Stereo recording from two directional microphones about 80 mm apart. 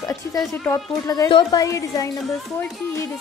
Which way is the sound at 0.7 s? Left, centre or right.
Left.